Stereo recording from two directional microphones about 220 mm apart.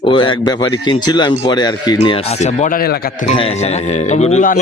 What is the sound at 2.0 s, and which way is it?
A man's voice, 30° left (ahead or behind).